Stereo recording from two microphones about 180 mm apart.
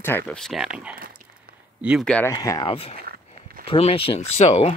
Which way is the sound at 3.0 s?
55° right (ahead or behind).